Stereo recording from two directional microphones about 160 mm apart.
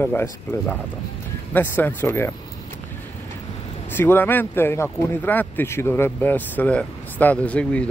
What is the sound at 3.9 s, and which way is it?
Speech, 15° left (ahead or behind).